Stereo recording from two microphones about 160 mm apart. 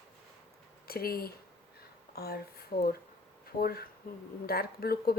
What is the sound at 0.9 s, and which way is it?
Speech, 70° left (ahead or behind).